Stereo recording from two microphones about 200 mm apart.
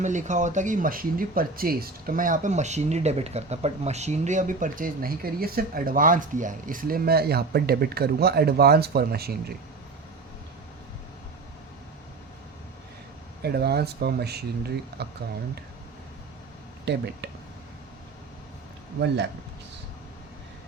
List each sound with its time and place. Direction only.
0.0 s speech: 35° right (ahead or behind)
13.4 s speech: 55° right (ahead or behind)
16.8 s speech: 55° right (ahead or behind)